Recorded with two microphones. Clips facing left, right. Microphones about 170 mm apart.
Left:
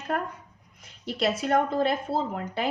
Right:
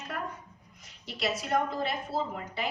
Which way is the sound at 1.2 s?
55° left (ahead or behind).